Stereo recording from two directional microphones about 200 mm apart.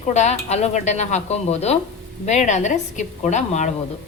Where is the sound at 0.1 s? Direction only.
35° left (ahead or behind).